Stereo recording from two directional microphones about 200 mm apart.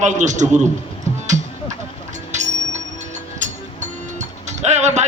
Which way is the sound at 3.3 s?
35° right (ahead or behind).